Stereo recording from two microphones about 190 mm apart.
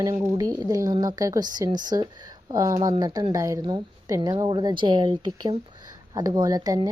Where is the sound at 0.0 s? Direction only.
15° right (ahead or behind).